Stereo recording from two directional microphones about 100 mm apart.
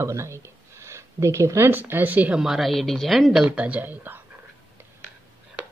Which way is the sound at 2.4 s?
Centre (ahead or behind).